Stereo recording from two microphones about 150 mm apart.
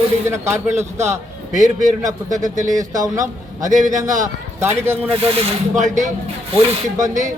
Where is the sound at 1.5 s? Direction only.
55° right (ahead or behind).